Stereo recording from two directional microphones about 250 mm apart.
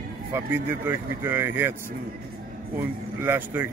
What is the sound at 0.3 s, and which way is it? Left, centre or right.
A man's voice, centre.